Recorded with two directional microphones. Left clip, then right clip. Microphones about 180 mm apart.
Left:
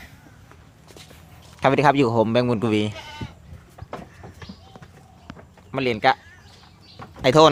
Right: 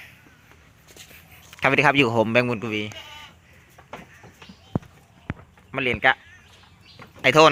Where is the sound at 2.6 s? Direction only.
25° left (ahead or behind).